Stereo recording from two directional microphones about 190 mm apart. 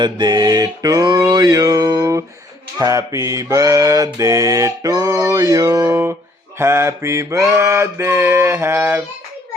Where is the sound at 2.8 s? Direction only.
15° right (ahead or behind).